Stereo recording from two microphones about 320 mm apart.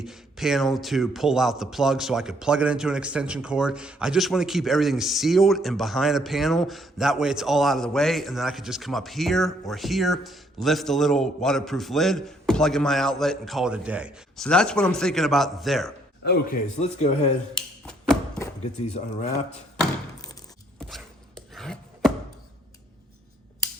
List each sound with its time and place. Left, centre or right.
0.0 s speech: centre
16.2 s a man's voice: left
17.8 s music: centre
18.8 s a man's voice: left
19.5 s a sound: centre
20.7 s chopping: centre